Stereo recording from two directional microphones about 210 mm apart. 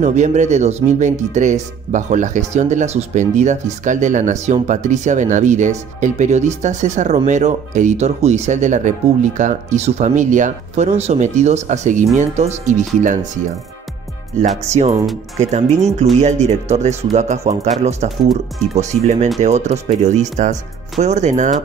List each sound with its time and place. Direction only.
0.0 s speech: 35° right (ahead or behind)
14.3 s speech: 35° right (ahead or behind)